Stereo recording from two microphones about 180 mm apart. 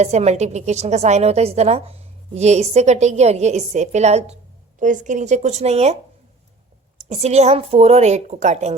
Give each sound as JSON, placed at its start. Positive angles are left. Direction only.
{"t": 0.0, "sound": "a woman's voice", "side_deg": -40}
{"t": 7.0, "sound": "a woman's voice", "side_deg": -40}